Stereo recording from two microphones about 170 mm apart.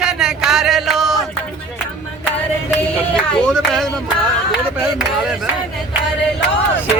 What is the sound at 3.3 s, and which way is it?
Speech, 5° left (ahead or behind).